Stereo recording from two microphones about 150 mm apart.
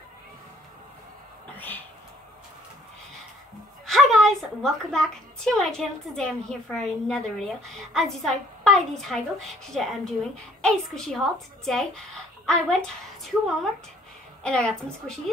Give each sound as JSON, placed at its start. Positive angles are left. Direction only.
{"t": 3.8, "sound": "a woman's voice", "side_deg": 0}